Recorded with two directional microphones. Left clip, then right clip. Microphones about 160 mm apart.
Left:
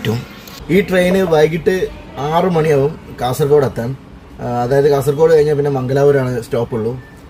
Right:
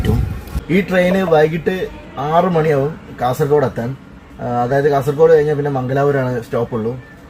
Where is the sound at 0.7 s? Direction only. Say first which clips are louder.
Left 2 dB; 15° left (ahead or behind).